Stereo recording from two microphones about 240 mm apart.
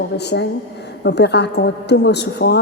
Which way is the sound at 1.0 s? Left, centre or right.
Left.